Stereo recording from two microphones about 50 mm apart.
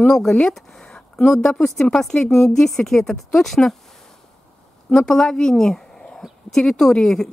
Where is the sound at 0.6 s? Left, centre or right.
Centre.